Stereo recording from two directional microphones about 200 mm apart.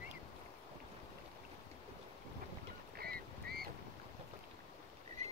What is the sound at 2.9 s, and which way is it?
Frog, 50° right (ahead or behind).